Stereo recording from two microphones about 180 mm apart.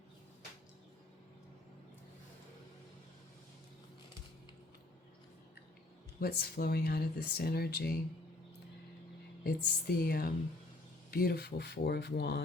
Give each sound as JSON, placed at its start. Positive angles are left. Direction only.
{"t": 6.1, "sound": "speech", "side_deg": 60}
{"t": 9.4, "sound": "speech", "side_deg": 60}